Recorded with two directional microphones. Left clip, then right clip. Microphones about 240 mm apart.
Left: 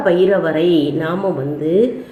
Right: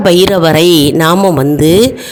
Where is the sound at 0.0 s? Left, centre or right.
Right.